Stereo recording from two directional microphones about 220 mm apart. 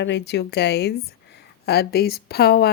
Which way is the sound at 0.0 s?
50° left (ahead or behind).